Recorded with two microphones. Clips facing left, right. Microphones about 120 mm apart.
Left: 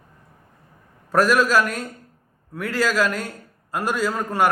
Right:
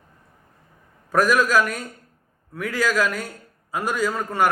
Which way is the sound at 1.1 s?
5° left (ahead or behind).